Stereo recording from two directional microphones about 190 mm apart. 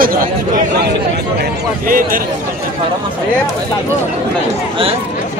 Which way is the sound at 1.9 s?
50° right (ahead or behind).